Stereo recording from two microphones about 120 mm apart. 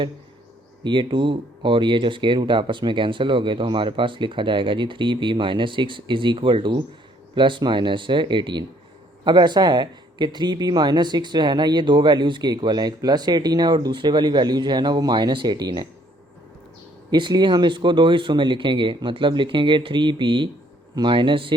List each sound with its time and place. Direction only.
0.9 s speech: 40° right (ahead or behind)
17.1 s speech: 40° right (ahead or behind)